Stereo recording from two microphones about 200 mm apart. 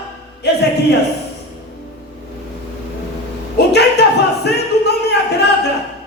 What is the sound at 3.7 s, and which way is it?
Singing, 55° left (ahead or behind).